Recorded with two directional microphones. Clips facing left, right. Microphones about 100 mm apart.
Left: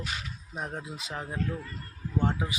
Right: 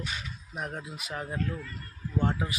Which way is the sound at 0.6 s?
25° left (ahead or behind).